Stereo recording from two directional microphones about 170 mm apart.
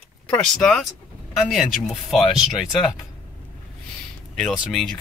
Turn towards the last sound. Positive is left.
turn(degrees=0)  # may be behind; listen again after turning